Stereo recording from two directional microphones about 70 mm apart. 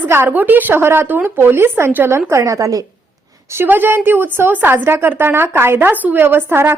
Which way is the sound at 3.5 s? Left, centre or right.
Right.